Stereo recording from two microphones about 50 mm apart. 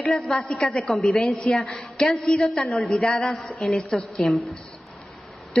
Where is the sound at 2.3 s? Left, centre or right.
Centre.